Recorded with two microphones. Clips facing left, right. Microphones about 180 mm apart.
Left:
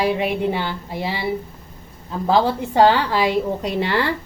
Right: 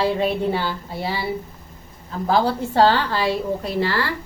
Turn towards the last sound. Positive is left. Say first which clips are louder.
# left 2 dB
turn(degrees=20)  # may be behind; listen again after turning